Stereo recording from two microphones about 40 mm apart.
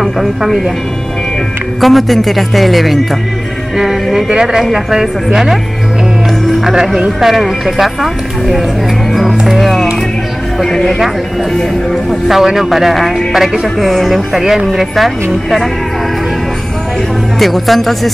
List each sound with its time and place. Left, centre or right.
0.0 s speech: centre
1.8 s speech: centre
3.7 s music: centre
4.3 s speech: centre
6.6 s speech: centre
9.3 s music: centre
10.6 s speech: centre
17.4 s speech: centre